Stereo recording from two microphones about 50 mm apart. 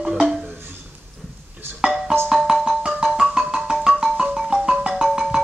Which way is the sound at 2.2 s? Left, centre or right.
Centre.